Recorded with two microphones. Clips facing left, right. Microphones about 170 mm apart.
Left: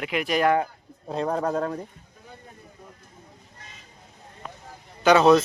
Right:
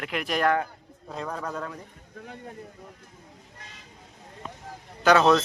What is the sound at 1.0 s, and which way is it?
Speech, 35° left (ahead or behind).